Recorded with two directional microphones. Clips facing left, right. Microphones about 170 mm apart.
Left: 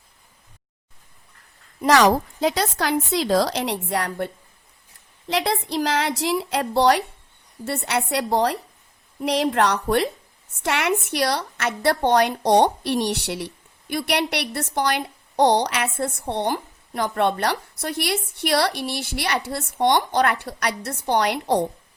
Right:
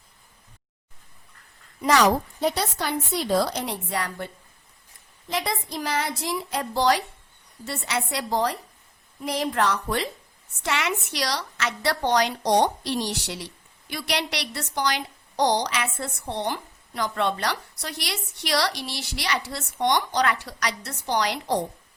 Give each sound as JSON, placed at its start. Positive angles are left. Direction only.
{"t": 2.0, "sound": "a woman's voice", "side_deg": 90}
{"t": 5.3, "sound": "a woman's voice", "side_deg": 70}